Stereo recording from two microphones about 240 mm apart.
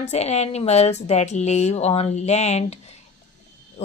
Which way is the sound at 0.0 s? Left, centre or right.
Left.